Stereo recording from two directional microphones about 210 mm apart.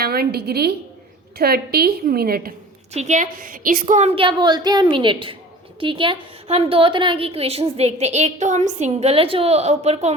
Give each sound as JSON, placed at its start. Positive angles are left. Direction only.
{"t": 0.0, "sound": "a woman's voice", "side_deg": -45}
{"t": 2.9, "sound": "a woman's voice", "side_deg": -35}